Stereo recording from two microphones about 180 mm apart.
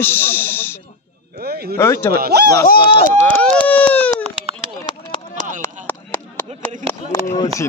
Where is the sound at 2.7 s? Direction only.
55° left (ahead or behind).